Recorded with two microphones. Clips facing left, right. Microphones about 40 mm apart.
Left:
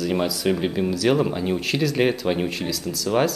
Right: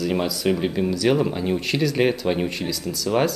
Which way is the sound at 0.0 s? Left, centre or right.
Centre.